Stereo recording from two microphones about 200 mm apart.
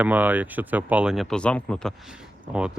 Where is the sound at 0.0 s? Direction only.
10° right (ahead or behind).